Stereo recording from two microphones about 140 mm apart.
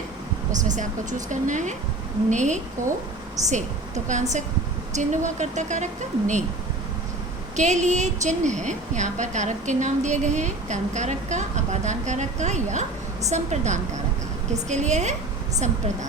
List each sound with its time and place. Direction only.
0.5 s a woman's voice: 65° right (ahead or behind)
3.4 s a woman's voice: 25° right (ahead or behind)
4.1 s a woman's voice: 60° right (ahead or behind)
7.5 s a woman's voice: 55° right (ahead or behind)